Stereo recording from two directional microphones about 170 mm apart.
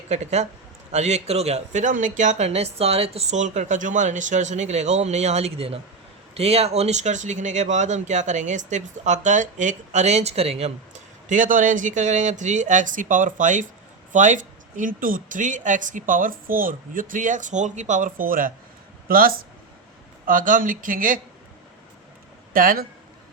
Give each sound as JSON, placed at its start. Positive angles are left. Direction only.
{"t": 0.1, "sound": "a man's voice", "side_deg": -40}
{"t": 22.5, "sound": "speech", "side_deg": -55}